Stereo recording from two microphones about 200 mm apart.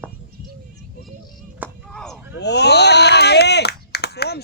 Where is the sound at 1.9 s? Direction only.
5° left (ahead or behind).